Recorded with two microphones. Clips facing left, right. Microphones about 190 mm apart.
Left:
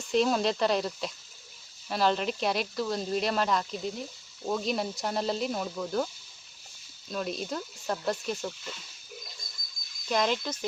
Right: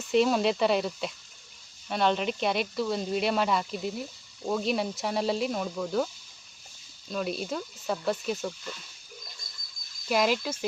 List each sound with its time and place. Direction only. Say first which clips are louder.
0.0 s speech: right 2 dB; centre (ahead or behind)
7.1 s speech: right 2 dB; centre (ahead or behind)
10.1 s speech: right 2 dB; 5° right (ahead or behind)